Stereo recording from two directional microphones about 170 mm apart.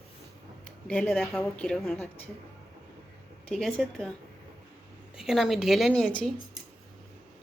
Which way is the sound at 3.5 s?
5° left (ahead or behind).